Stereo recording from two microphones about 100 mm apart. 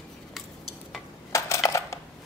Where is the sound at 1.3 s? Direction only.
30° left (ahead or behind).